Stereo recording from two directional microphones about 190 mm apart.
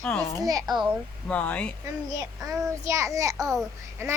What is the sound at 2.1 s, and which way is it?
A child's voice, 15° right (ahead or behind).